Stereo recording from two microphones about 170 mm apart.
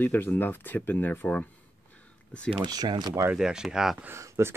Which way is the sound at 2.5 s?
25° right (ahead or behind).